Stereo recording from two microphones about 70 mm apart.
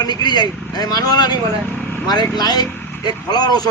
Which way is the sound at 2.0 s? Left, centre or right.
Left.